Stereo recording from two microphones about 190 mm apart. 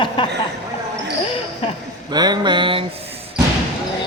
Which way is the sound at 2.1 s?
20° right (ahead or behind).